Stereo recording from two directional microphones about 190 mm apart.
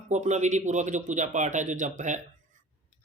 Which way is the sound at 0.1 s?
40° right (ahead or behind).